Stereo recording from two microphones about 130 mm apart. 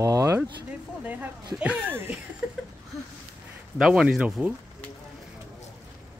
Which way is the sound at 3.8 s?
5° right (ahead or behind).